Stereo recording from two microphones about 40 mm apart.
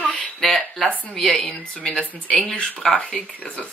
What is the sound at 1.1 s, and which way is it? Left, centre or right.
Speech, centre.